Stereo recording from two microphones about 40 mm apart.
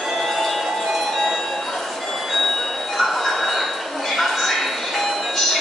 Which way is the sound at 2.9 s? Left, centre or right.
Centre.